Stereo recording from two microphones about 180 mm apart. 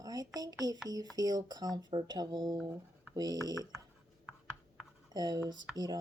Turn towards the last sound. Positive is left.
turn(degrees=-20)  # may be behind; listen again after turning